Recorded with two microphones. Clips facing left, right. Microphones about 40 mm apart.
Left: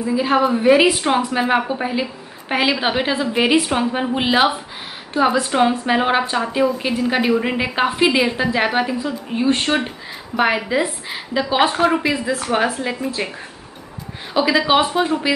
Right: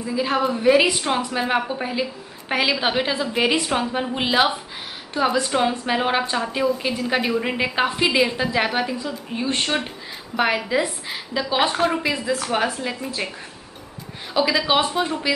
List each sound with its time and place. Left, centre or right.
0.0 s a woman's voice: centre
14.3 s a woman's voice: centre